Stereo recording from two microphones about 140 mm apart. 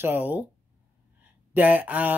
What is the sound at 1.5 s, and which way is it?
Speech, 10° right (ahead or behind).